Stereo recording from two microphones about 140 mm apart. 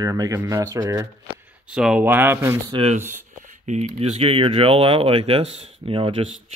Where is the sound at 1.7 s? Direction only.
5° right (ahead or behind).